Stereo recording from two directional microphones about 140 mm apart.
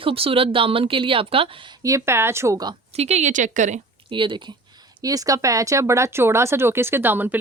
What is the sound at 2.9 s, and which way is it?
Speech, 50° right (ahead or behind).